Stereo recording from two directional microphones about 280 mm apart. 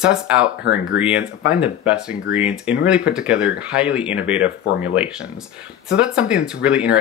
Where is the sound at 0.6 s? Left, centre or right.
Left.